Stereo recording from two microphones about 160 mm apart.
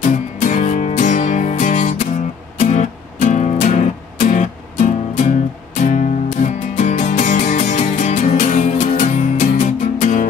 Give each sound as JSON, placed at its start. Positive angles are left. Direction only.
{"t": 0.0, "sound": "music", "side_deg": 50}